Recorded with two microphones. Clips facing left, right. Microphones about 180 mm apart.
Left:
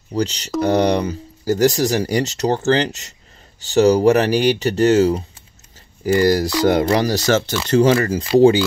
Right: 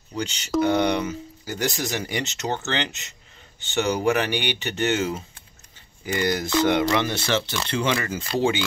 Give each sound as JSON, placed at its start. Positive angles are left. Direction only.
{"t": 0.1, "sound": "speech", "side_deg": 35}